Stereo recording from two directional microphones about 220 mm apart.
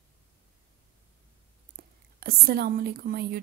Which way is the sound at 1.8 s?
45° right (ahead or behind).